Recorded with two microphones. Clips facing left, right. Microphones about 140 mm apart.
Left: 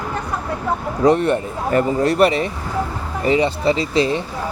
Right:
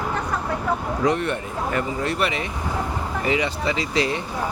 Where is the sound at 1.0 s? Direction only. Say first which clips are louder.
Left 9 dB; 35° left (ahead or behind).